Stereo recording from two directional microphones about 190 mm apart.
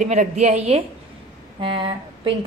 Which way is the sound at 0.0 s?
40° right (ahead or behind).